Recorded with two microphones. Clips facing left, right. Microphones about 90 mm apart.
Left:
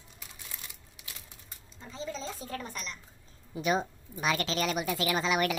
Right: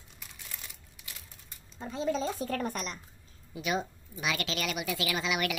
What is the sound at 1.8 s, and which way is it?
Speech, 50° right (ahead or behind).